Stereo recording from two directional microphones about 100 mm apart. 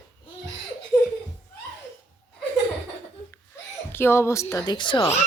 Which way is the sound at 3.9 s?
25° left (ahead or behind).